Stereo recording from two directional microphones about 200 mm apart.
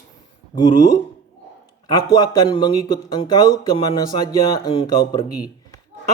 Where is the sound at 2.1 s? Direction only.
20° left (ahead or behind).